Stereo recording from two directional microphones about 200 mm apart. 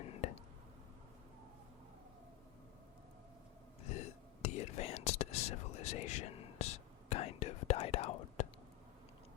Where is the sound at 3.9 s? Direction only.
35° left (ahead or behind).